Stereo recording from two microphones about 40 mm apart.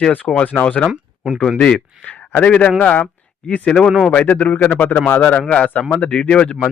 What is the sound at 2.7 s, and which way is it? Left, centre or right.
Speech, left.